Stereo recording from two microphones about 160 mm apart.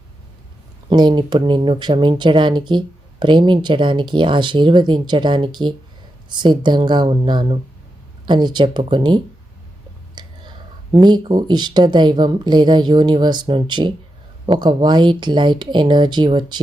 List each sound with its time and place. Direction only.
0.9 s speech: 30° right (ahead or behind)
10.2 s whispering: 25° right (ahead or behind)
10.9 s speech: 30° right (ahead or behind)